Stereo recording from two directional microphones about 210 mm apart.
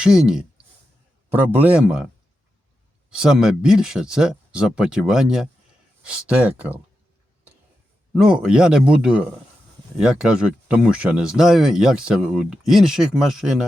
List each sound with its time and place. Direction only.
0.0 s speech: 5° right (ahead or behind)
1.5 s speech: 5° right (ahead or behind)
3.1 s speech: 5° right (ahead or behind)
8.1 s speech: 5° right (ahead or behind)